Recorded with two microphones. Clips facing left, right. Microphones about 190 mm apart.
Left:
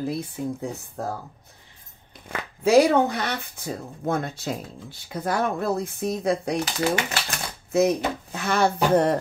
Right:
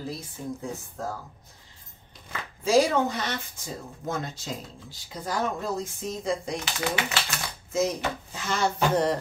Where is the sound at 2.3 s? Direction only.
65° left (ahead or behind).